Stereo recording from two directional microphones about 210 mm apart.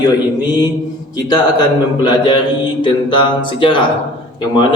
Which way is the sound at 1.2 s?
20° left (ahead or behind).